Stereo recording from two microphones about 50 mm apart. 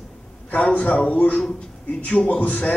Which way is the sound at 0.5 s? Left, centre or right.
Left.